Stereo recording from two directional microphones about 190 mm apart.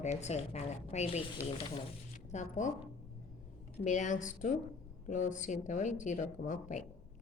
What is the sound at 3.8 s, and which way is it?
A woman's voice, 40° left (ahead or behind).